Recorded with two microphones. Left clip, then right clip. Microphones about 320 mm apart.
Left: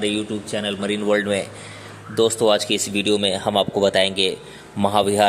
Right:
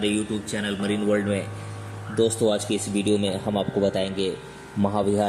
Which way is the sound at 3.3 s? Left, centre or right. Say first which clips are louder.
Left 7 dB; left.